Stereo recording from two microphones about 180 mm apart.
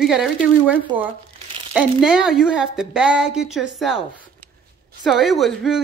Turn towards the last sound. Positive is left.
turn(degrees=0)  # may be behind; listen again after turning